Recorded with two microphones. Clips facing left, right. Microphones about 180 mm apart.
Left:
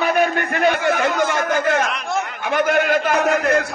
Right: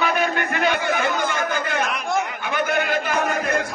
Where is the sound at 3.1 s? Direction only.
75° left (ahead or behind).